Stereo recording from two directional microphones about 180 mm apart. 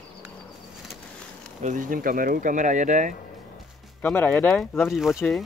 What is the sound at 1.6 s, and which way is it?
Speech, 45° right (ahead or behind).